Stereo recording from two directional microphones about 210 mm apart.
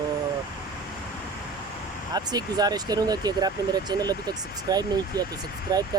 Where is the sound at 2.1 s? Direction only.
20° right (ahead or behind).